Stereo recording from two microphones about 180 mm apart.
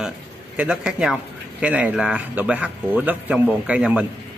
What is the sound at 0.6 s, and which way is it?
A man's voice, 5° right (ahead or behind).